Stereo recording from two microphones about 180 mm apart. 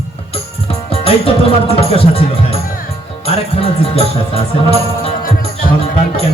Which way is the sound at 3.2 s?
35° left (ahead or behind).